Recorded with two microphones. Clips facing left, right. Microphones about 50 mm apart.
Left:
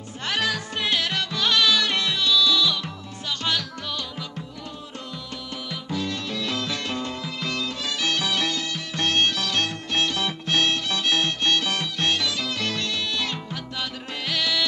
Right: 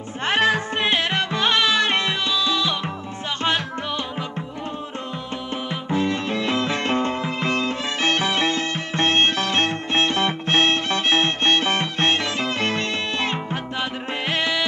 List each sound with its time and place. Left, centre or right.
0.2 s music: right
5.7 s music: right